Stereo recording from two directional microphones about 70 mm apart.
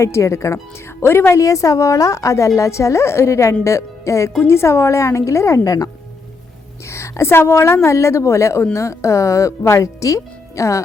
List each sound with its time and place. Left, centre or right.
0.0 s speech: left
1.0 s speech: left
6.8 s speech: left